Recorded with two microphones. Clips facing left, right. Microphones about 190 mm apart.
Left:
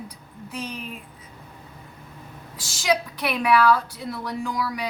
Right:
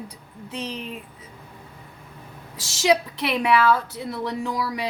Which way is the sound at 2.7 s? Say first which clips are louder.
Right 3 dB; 25° right (ahead or behind).